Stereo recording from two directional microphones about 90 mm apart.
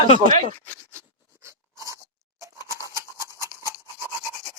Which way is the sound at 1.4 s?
35° right (ahead or behind).